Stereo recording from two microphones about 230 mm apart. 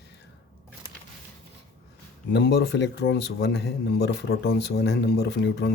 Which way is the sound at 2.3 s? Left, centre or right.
Left.